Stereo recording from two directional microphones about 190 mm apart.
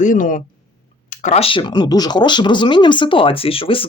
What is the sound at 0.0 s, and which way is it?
Speech, 45° left (ahead or behind).